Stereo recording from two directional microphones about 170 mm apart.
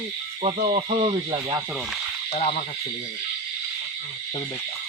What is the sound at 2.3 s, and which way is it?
Owl, 35° left (ahead or behind).